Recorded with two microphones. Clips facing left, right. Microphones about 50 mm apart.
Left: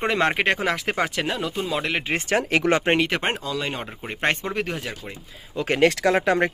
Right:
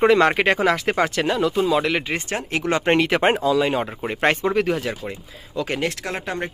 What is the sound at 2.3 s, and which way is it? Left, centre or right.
Speech, left.